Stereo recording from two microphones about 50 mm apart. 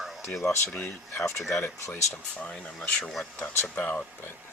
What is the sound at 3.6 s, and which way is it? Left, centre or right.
Speech, left.